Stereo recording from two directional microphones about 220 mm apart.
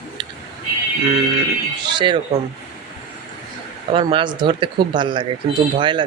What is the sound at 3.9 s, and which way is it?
Speech, 25° right (ahead or behind).